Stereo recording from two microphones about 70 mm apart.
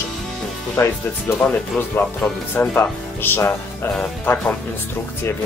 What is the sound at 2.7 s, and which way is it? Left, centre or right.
Speech, left.